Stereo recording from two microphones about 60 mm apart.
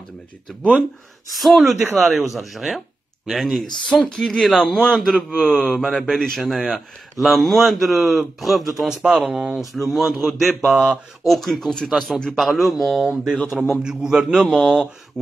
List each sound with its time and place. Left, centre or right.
1.3 s speech: centre
3.8 s speech: centre
13.0 s speech: centre
13.5 s speech: centre
13.8 s a man's voice: centre